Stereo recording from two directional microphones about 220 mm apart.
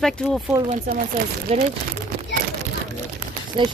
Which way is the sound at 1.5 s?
25° right (ahead or behind).